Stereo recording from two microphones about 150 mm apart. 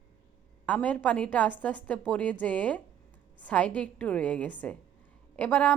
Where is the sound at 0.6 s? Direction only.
10° left (ahead or behind).